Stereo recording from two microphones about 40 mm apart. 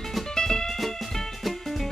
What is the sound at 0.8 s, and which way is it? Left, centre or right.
Music, centre.